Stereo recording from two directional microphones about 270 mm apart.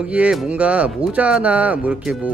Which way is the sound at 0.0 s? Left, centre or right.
Centre.